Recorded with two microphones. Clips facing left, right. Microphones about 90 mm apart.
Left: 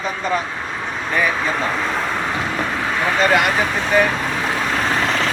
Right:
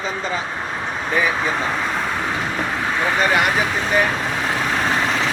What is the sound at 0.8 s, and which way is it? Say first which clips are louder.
Speech: left 1 dB; 15° right (ahead or behind).